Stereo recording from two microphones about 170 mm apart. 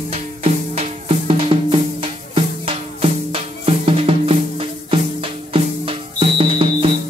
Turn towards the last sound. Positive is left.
turn(degrees=-35)  # may be behind; listen again after turning